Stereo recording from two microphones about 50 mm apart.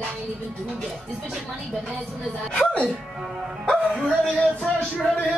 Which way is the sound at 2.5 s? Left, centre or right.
Left.